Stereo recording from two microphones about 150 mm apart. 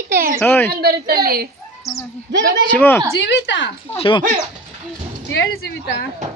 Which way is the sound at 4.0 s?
35° left (ahead or behind).